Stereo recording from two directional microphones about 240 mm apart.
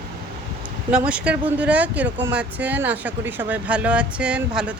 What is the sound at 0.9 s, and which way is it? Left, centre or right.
Speech, centre.